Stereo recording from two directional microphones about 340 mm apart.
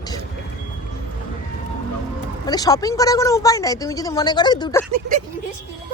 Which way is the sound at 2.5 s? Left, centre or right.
Centre.